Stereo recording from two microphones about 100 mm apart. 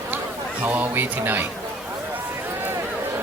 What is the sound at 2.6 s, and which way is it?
Run, 20° right (ahead or behind).